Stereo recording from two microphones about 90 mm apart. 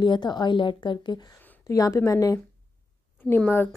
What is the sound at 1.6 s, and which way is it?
Speech, 35° left (ahead or behind).